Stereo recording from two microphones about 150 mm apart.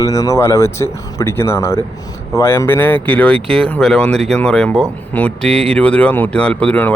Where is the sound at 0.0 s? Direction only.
20° left (ahead or behind).